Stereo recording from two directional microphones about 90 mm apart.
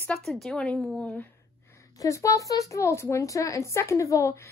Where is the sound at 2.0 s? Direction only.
35° left (ahead or behind).